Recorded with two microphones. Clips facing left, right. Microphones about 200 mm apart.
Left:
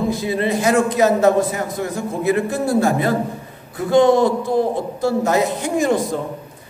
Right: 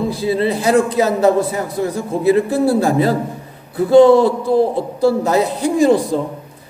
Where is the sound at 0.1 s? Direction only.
30° right (ahead or behind).